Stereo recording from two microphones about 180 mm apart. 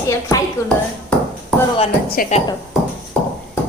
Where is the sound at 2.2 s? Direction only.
55° left (ahead or behind).